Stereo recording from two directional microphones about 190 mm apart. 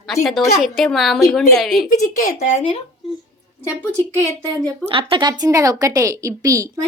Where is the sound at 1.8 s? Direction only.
40° left (ahead or behind).